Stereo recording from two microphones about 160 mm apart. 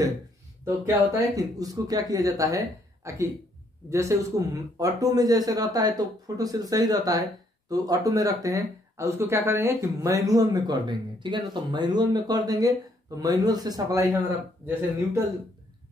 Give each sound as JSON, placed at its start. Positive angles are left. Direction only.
{"t": 0.7, "sound": "speech", "side_deg": -20}